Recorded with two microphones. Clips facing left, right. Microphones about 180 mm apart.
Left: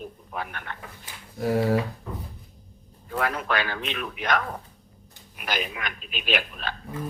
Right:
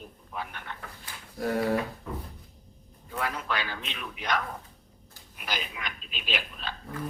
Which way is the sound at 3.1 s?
60° left (ahead or behind).